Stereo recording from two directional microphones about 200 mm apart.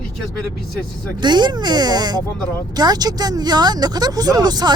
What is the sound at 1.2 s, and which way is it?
Speech, 20° right (ahead or behind).